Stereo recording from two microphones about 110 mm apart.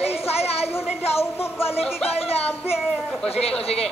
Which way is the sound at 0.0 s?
70° left (ahead or behind).